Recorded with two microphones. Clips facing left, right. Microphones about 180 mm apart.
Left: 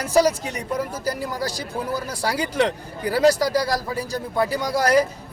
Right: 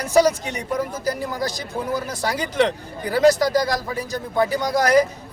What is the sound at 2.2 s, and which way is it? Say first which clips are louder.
Speech: right 1 dB; 10° left (ahead or behind).